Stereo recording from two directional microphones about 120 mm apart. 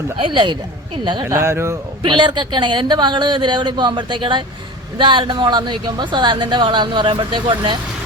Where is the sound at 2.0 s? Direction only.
40° right (ahead or behind).